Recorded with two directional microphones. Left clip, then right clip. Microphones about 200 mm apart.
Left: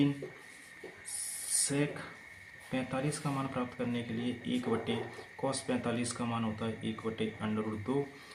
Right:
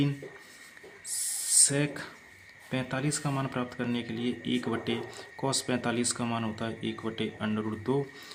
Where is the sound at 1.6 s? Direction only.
55° right (ahead or behind).